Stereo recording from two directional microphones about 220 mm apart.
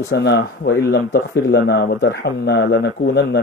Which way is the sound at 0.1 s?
50° left (ahead or behind).